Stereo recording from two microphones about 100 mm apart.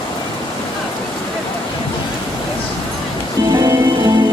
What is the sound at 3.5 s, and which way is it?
Music, 35° right (ahead or behind).